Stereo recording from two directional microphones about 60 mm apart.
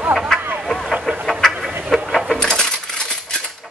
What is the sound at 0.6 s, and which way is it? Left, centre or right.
Vehicle, centre.